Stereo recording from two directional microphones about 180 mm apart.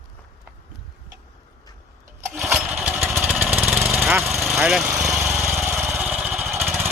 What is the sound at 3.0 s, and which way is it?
Vehicle, 10° right (ahead or behind).